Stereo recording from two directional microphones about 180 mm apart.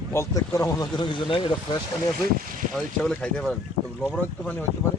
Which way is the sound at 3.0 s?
5° left (ahead or behind).